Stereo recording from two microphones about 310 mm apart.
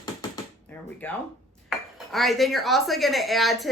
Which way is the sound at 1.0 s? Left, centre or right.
Centre.